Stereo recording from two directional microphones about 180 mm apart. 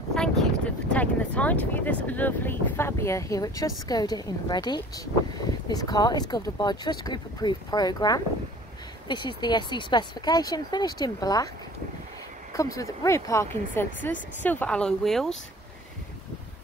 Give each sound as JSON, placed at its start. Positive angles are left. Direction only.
{"t": 0.1, "sound": "a sound", "side_deg": 5}
{"t": 0.9, "sound": "speech", "side_deg": 10}
{"t": 12.5, "sound": "speech", "side_deg": 20}